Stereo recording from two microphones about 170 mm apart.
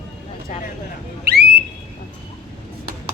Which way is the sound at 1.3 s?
70° right (ahead or behind).